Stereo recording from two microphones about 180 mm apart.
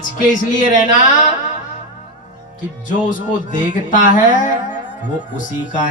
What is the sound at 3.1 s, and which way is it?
Speech, 45° left (ahead or behind).